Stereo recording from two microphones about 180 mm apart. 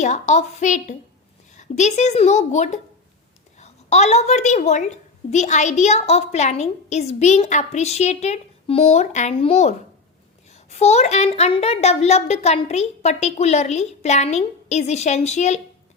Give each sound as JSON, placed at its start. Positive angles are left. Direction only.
{"t": 0.0, "sound": "a woman's voice", "side_deg": 40}